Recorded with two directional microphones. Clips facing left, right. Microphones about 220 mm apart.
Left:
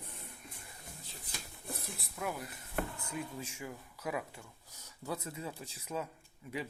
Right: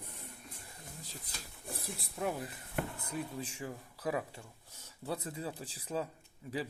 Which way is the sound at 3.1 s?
30° right (ahead or behind).